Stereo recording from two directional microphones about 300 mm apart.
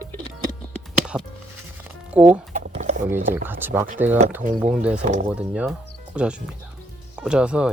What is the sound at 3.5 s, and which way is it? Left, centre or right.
Speech, centre.